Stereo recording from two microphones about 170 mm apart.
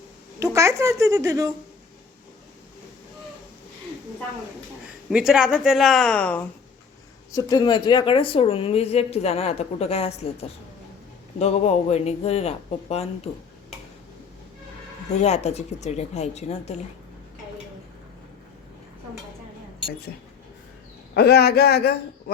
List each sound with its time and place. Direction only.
0.3 s a child's voice: 15° right (ahead or behind)
5.1 s speech: 5° right (ahead or behind)
7.3 s speech: 20° left (ahead or behind); by 13.7 s 40° left (ahead or behind)
15.1 s speech: 40° left (ahead or behind)
21.2 s a man's voice: 70° left (ahead or behind)